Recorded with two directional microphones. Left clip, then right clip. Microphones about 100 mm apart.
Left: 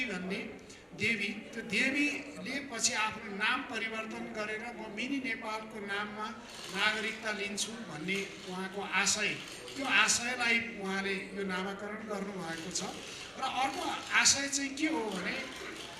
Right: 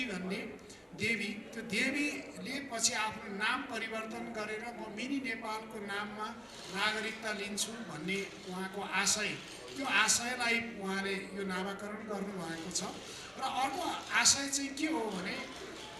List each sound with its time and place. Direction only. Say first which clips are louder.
0.0 s a man's voice: left 2 dB; 20° right (ahead or behind)